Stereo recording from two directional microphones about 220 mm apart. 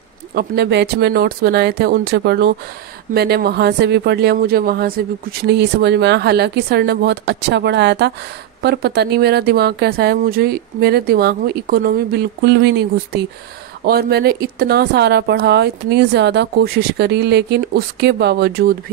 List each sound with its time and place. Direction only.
0.3 s speech: 45° right (ahead or behind)